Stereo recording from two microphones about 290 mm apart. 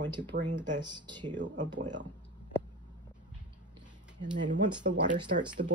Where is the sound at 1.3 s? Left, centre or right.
Right.